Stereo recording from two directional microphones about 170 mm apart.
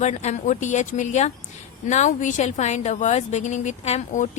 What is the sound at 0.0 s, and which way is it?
A woman's voice, 40° left (ahead or behind).